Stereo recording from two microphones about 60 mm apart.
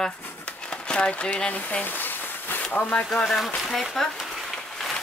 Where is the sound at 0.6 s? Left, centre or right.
Centre; by 2.6 s left.